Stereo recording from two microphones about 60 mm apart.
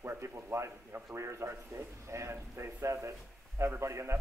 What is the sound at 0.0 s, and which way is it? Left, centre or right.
Speech, right.